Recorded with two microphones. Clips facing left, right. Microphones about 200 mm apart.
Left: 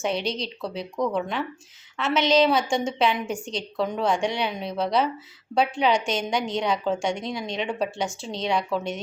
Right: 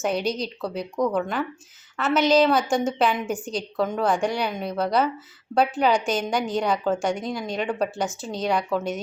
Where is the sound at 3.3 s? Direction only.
30° left (ahead or behind).